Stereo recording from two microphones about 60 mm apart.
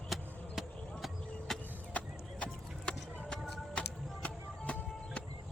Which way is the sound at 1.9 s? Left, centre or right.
Centre.